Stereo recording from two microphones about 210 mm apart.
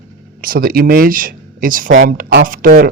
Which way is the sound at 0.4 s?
45° right (ahead or behind).